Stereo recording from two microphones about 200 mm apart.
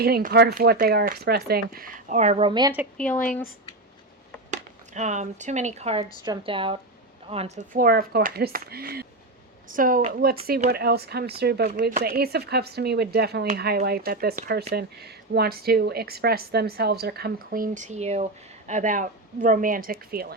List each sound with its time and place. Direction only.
0.0 s speech: 50° right (ahead or behind); by 2.7 s 20° right (ahead or behind)
4.5 s speech: 35° right (ahead or behind)